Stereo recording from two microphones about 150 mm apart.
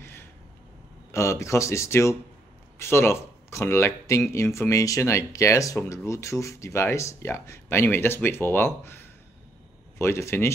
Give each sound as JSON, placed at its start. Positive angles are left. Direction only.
{"t": 1.1, "sound": "speech", "side_deg": 20}